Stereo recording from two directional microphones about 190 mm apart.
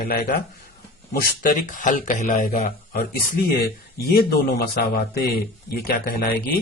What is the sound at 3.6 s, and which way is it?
A man's voice, 55° left (ahead or behind).